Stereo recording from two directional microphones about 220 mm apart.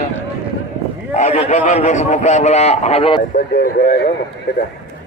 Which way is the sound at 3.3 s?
40° left (ahead or behind).